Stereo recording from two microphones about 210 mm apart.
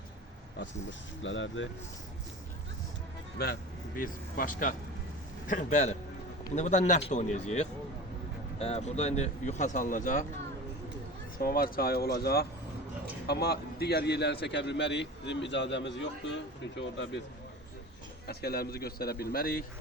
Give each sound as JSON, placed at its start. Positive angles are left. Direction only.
{"t": 0.6, "sound": "a man's voice", "side_deg": 60}
{"t": 3.3, "sound": "a man's voice", "side_deg": 45}
{"t": 11.4, "sound": "a man's voice", "side_deg": 45}
{"t": 18.3, "sound": "a man's voice", "side_deg": 50}